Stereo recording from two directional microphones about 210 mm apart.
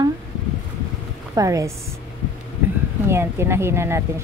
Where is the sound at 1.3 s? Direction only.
15° right (ahead or behind).